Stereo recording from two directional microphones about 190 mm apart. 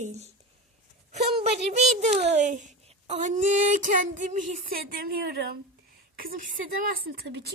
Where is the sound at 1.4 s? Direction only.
35° right (ahead or behind); by 5.6 s 50° right (ahead or behind).